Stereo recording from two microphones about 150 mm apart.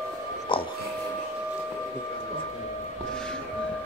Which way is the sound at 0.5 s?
35° left (ahead or behind).